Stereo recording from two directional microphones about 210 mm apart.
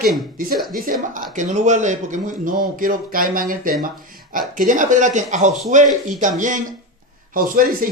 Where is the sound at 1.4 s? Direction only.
35° right (ahead or behind).